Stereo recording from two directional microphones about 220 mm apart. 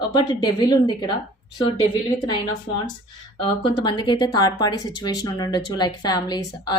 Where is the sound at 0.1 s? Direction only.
20° left (ahead or behind).